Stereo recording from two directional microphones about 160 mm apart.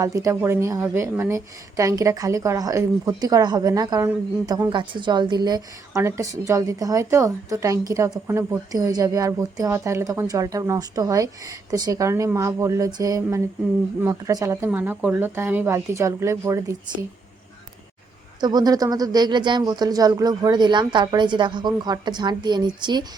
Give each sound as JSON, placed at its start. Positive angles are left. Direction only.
{"t": 0.0, "sound": "a woman's voice", "side_deg": -20}
{"t": 18.3, "sound": "a woman's voice", "side_deg": -25}